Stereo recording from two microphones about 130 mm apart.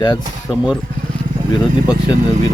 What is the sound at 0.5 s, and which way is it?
Speech, 5° right (ahead or behind).